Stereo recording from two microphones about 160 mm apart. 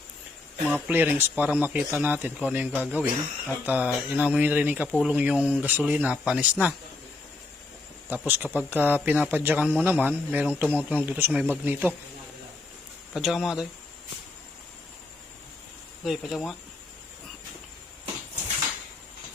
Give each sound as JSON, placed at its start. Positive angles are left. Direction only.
{"t": 0.7, "sound": "speech", "side_deg": -10}
{"t": 8.1, "sound": "speech", "side_deg": -10}
{"t": 13.1, "sound": "speech", "side_deg": 0}
{"t": 16.0, "sound": "speech", "side_deg": 0}